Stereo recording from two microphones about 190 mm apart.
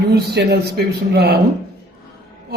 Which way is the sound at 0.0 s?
60° right (ahead or behind).